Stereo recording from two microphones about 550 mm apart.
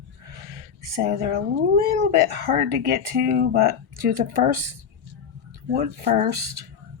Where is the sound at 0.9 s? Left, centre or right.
Centre.